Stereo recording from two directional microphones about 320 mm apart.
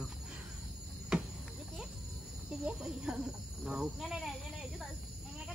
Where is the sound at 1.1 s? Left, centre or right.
Centre.